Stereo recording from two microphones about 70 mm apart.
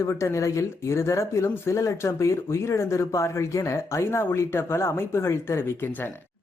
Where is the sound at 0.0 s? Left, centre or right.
Left.